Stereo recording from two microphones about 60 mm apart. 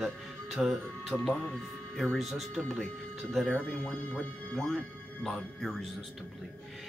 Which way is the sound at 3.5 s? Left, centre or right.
Centre.